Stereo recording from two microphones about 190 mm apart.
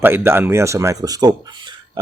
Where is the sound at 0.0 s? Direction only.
10° right (ahead or behind).